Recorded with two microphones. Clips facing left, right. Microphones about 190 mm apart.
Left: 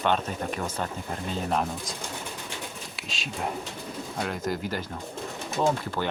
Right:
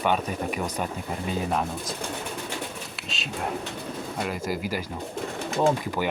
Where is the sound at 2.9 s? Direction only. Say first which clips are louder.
Right 2 dB; centre (ahead or behind).